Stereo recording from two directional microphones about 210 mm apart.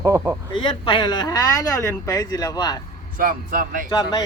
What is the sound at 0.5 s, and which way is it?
Speech, 25° left (ahead or behind).